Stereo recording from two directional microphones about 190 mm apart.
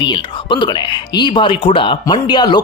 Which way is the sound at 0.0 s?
25° left (ahead or behind).